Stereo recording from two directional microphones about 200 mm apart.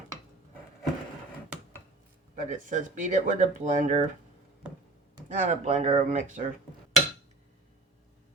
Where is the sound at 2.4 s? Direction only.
40° right (ahead or behind).